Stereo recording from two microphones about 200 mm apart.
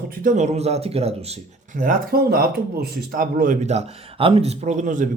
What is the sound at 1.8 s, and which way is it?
Speech, 45° right (ahead or behind).